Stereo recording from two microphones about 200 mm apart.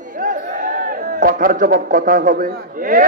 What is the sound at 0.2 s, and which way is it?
A man's voice, 45° right (ahead or behind).